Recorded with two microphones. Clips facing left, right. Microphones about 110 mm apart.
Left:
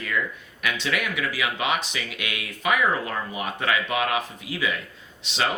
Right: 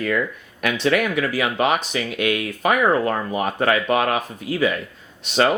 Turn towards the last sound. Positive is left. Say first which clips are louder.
# right 8 dB
turn(degrees=-50)  # may be behind; listen again after turning